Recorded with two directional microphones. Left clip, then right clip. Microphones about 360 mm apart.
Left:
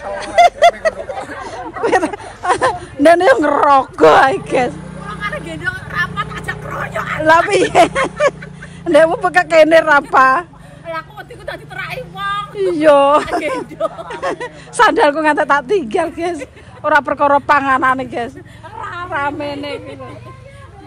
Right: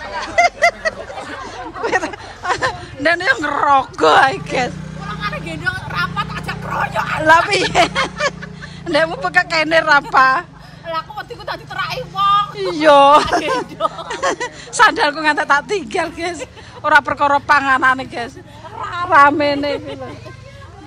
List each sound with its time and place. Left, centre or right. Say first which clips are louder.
1.4 s a sound: left 4 dB; centre
3.0 s speech: left 6 dB; centre
5.2 s vehicle: left 1 dB; centre
6.8 s speech: right 2 dB; centre
7.2 s speech: left 1 dB; centre
10.9 s vehicle: right 2 dB; centre
12.5 s speech: left 3 dB; centre
19.0 s speech: right 10 dB; right